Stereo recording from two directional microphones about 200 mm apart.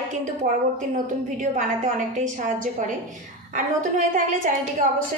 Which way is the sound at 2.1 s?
40° right (ahead or behind).